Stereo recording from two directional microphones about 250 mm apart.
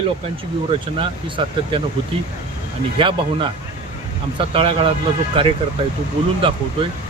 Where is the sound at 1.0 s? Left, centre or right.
Right.